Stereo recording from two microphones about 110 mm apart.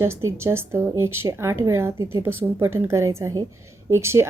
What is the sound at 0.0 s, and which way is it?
Speech, 25° right (ahead or behind).